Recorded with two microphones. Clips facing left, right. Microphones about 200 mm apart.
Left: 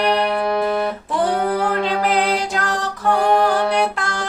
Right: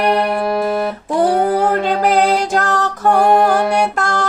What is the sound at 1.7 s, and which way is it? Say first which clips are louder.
Music: right 4 dB; 45° right (ahead or behind).